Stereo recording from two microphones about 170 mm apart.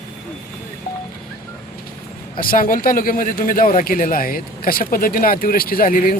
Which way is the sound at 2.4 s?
55° left (ahead or behind).